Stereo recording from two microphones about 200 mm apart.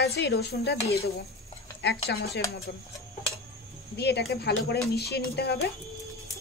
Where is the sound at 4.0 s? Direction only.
55° left (ahead or behind).